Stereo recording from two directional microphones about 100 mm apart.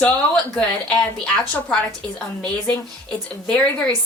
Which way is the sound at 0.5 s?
10° left (ahead or behind).